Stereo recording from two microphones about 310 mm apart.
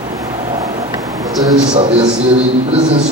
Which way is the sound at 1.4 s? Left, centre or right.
Centre.